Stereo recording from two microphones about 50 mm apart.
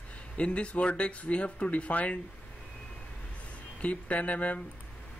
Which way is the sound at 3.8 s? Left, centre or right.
Left.